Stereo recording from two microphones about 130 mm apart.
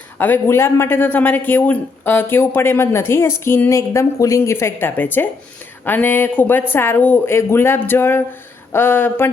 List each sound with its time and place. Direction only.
0.2 s speech: 15° left (ahead or behind)